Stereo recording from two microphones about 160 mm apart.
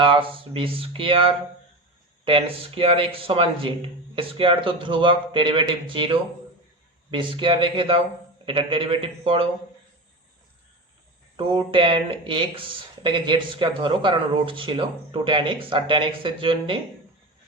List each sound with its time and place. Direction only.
0.0 s speech: 30° right (ahead or behind)
11.3 s speech: 30° right (ahead or behind)